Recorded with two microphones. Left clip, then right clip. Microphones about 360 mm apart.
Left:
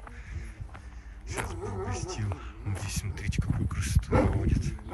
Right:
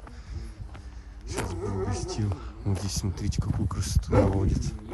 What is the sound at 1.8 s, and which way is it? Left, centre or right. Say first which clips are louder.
Speech: right 3 dB; centre.